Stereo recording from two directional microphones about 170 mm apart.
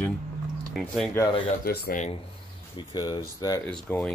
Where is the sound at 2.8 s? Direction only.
25° left (ahead or behind).